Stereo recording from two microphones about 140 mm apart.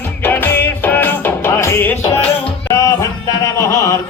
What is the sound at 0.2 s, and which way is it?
Music, 15° left (ahead or behind).